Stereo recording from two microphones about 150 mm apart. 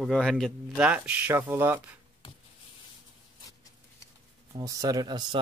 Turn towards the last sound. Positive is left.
turn(degrees=-30)  # may be behind; listen again after turning